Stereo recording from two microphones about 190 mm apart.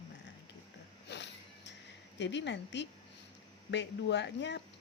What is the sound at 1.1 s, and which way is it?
Music, 65° left (ahead or behind).